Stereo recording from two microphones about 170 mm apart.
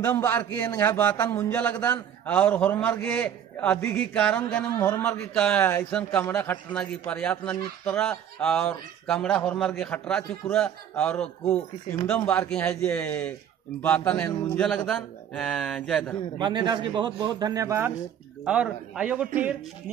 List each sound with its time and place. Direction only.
0.0 s a man's voice: 10° left (ahead or behind)
16.3 s a man's voice: 25° right (ahead or behind); by 19.2 s 5° right (ahead or behind)